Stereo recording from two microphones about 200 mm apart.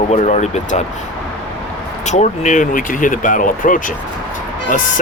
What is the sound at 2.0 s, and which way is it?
Speech, 35° left (ahead or behind).